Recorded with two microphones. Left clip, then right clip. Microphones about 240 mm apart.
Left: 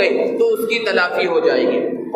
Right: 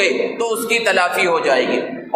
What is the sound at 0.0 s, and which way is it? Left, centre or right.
A man's voice, right.